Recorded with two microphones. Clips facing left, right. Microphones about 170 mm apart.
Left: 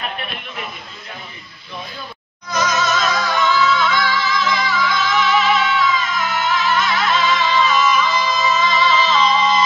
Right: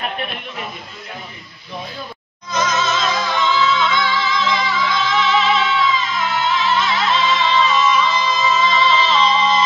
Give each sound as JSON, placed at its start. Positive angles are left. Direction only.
{"t": 2.5, "sound": "music", "side_deg": -25}